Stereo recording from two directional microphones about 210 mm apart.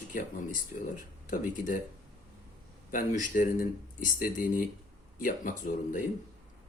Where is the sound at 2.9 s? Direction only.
40° left (ahead or behind).